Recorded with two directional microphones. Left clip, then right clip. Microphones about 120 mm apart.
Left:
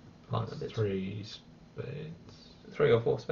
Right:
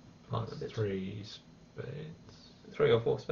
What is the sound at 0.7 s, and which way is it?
Speech, 5° right (ahead or behind).